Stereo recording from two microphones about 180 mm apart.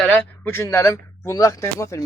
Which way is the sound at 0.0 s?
10° left (ahead or behind).